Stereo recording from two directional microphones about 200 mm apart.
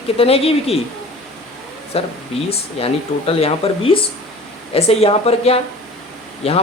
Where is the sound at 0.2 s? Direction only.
30° left (ahead or behind).